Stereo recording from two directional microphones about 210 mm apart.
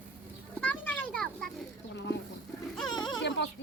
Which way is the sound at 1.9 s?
55° left (ahead or behind).